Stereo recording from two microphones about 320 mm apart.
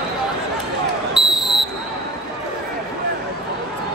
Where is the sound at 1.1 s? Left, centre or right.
Centre.